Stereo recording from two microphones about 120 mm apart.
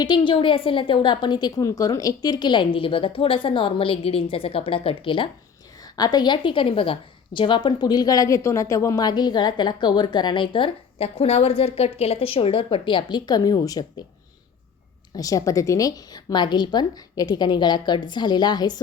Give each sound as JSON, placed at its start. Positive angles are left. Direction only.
{"t": 0.0, "sound": "a woman's voice", "side_deg": 40}
{"t": 6.0, "sound": "a woman's voice", "side_deg": 35}
{"t": 15.1, "sound": "a woman's voice", "side_deg": 30}